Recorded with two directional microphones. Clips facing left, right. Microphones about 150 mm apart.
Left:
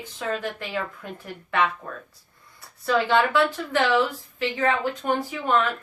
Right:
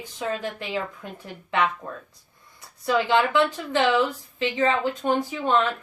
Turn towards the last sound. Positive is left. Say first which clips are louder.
# right 1 dB
turn(degrees=-20)  # may be behind; listen again after turning